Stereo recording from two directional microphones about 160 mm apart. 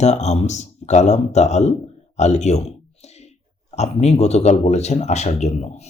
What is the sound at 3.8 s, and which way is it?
Speech, 45° left (ahead or behind).